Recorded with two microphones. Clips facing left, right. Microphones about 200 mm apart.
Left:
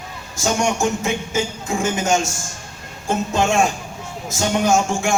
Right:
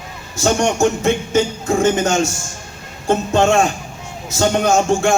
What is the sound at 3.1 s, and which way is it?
Speech, 60° right (ahead or behind).